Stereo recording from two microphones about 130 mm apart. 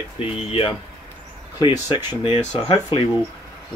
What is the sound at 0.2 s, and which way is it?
Speech, 45° left (ahead or behind).